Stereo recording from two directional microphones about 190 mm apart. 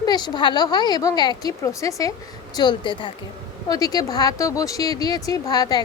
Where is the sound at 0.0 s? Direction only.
20° left (ahead or behind).